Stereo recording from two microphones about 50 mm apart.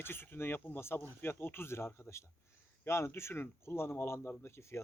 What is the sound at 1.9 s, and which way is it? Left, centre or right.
A man's voice, left.